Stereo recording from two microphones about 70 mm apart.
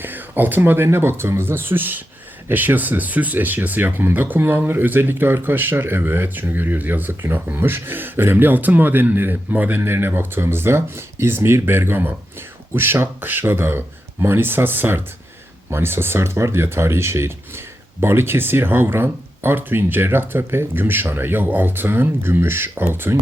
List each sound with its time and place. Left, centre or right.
0.0 s speech: right